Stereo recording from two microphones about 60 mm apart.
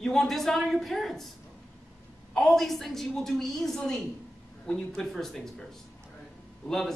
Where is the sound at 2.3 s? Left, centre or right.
Centre.